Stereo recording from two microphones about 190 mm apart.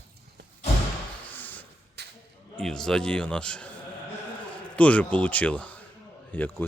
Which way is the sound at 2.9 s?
5° left (ahead or behind).